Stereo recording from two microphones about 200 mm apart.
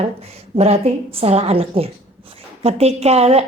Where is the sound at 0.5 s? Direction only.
30° right (ahead or behind).